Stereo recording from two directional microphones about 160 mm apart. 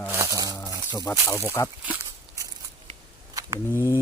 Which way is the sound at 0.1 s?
20° right (ahead or behind).